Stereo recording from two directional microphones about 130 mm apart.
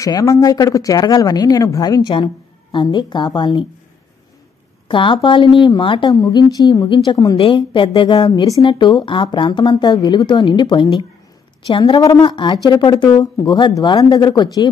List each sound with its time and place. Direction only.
0.0 s speech: 25° left (ahead or behind)
4.8 s speech: 40° left (ahead or behind)